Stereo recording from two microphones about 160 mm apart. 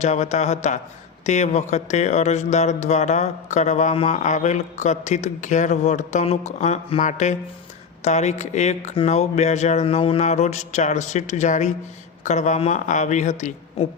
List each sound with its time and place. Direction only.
0.0 s speech: 45° left (ahead or behind)